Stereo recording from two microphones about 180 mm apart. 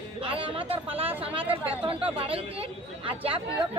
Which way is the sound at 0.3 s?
30° right (ahead or behind).